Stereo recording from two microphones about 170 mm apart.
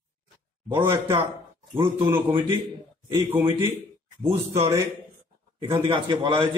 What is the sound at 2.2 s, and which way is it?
Speech, 30° right (ahead or behind).